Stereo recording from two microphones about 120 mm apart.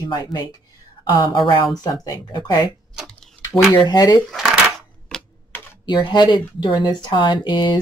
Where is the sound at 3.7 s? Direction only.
35° left (ahead or behind).